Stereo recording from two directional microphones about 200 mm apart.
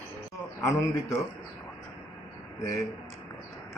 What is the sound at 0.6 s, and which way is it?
Speech, 15° left (ahead or behind).